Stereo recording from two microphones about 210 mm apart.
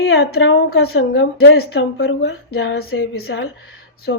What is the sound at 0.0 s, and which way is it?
A woman's voice, 50° left (ahead or behind).